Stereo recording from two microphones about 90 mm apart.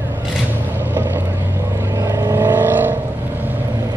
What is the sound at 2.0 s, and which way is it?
Vehicle, 40° right (ahead or behind).